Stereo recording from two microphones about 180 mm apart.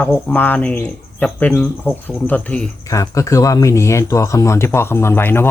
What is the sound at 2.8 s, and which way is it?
Speech, 20° left (ahead or behind).